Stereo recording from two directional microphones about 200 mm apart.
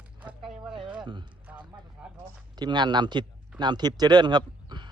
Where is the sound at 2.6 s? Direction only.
20° right (ahead or behind).